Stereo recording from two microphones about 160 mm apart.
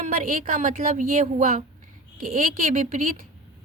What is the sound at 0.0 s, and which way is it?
A woman's voice, 60° right (ahead or behind).